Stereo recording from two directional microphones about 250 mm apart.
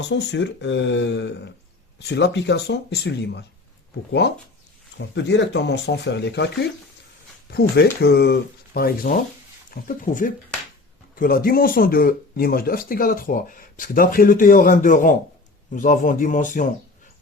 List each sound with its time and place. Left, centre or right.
0.0 s speech: left
4.9 s speech: left
7.5 s speech: left